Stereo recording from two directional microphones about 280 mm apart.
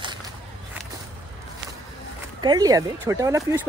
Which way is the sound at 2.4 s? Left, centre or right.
Centre.